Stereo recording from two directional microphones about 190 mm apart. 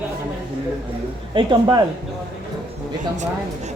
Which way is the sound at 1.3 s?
25° right (ahead or behind).